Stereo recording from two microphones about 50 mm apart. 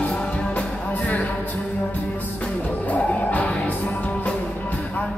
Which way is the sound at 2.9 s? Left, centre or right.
Left.